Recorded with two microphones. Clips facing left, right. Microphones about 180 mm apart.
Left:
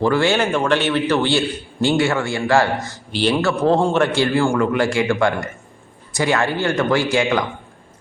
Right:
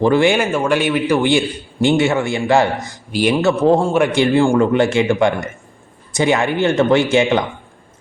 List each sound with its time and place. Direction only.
0.0 s a man's voice: 20° right (ahead or behind)